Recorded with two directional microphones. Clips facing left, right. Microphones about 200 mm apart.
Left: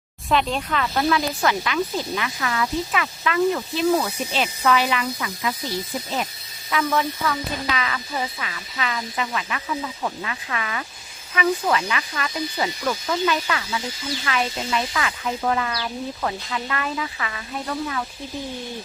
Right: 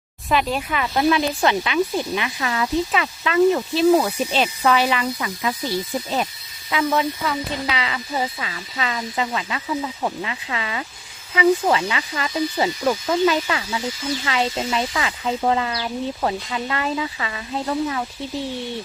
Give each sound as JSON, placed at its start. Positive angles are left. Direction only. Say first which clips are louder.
{"t": 0.3, "sound": "speech", "louder": "right 1 dB", "side_deg": -5}
{"t": 6.7, "sound": "speech", "louder": "right 2 dB", "side_deg": -20}